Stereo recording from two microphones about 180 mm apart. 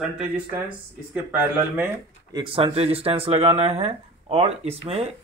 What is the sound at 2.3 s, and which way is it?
Speech, 30° right (ahead or behind).